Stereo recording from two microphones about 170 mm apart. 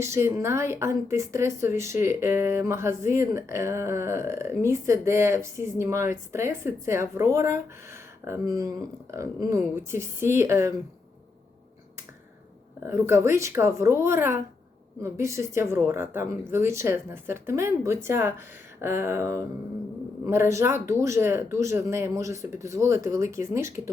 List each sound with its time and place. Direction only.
0.0 s speech: 15° right (ahead or behind)
12.8 s speech: 15° right (ahead or behind)